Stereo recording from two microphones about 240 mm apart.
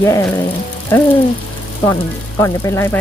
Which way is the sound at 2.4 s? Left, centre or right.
Centre.